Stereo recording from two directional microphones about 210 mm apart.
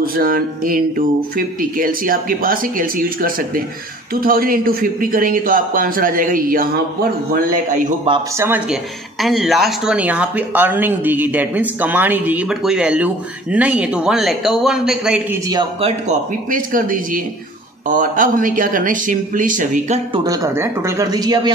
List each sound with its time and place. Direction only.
0.0 s speech: 45° right (ahead or behind)
8.1 s speech: 10° right (ahead or behind)
15.8 s speech: 35° right (ahead or behind)
20.1 s speech: 15° right (ahead or behind)